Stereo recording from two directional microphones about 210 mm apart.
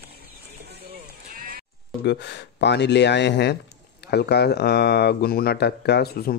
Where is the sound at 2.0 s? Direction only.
55° left (ahead or behind).